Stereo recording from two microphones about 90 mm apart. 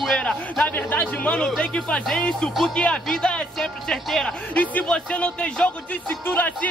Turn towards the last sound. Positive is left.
turn(degrees=20)  # may be behind; listen again after turning